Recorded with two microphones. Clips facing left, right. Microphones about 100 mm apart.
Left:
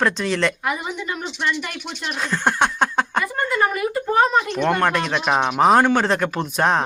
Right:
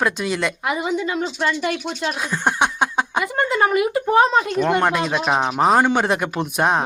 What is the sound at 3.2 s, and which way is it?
Speech, 20° right (ahead or behind).